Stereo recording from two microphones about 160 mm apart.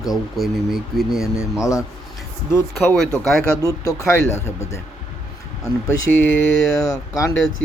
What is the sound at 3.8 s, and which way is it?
Speech, 15° left (ahead or behind).